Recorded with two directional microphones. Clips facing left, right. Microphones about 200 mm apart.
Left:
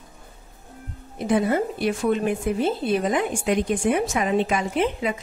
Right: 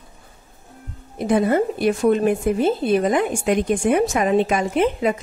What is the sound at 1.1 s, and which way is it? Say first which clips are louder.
A woman's voice: right 3 dB; 45° right (ahead or behind).